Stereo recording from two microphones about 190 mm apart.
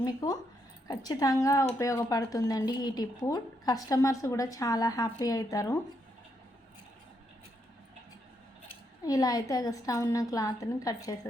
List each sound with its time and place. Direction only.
0.0 s speech: 20° left (ahead or behind)
9.0 s speech: 20° left (ahead or behind)